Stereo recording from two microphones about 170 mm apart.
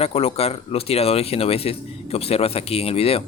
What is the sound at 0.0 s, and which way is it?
Speech, 35° left (ahead or behind).